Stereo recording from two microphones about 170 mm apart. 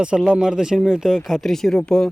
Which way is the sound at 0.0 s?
5° right (ahead or behind).